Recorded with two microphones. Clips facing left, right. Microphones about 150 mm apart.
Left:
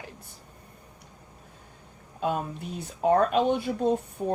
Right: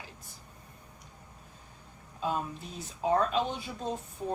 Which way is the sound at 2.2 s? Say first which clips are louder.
Left 4 dB; 60° left (ahead or behind).